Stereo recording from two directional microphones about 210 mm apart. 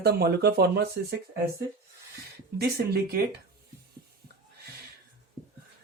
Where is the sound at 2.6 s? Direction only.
50° right (ahead or behind).